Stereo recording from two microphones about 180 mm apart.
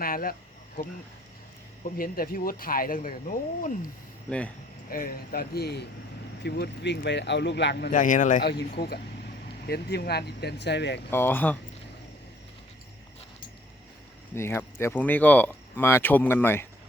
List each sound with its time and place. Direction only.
0.0 s speech: 55° left (ahead or behind)
1.8 s speech: 55° left (ahead or behind)
4.3 s speech: 5° left (ahead or behind)
4.9 s speech: 55° left (ahead or behind)
7.9 s speech: 45° left (ahead or behind)
8.4 s speech: 65° left (ahead or behind)
11.1 s speech: 10° left (ahead or behind)
14.3 s speech: 15° left (ahead or behind)